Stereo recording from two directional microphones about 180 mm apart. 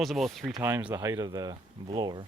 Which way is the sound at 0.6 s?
10° right (ahead or behind).